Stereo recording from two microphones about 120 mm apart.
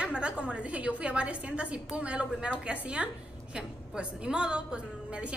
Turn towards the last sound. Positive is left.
turn(degrees=-10)  # may be behind; listen again after turning